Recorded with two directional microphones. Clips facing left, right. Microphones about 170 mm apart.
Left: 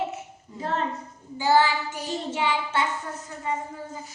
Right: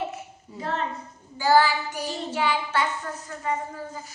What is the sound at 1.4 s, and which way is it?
Child singing, 20° left (ahead or behind).